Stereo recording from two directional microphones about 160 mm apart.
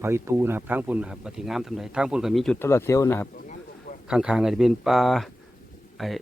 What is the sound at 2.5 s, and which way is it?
Speech, 15° left (ahead or behind).